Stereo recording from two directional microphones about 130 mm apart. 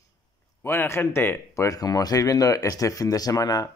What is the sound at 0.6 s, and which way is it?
Speech, 15° left (ahead or behind).